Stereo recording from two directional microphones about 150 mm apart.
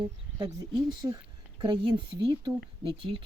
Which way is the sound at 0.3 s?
25° right (ahead or behind).